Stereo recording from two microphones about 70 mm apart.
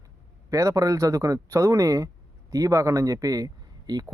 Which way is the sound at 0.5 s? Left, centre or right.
Right.